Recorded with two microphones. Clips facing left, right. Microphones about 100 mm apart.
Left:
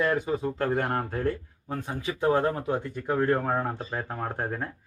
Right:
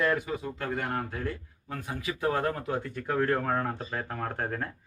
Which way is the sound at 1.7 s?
25° left (ahead or behind).